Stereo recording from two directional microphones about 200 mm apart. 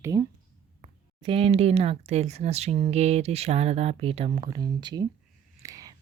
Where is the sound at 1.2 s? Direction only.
30° right (ahead or behind).